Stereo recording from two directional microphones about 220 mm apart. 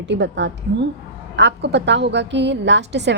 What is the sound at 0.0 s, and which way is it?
A woman's voice, 55° right (ahead or behind).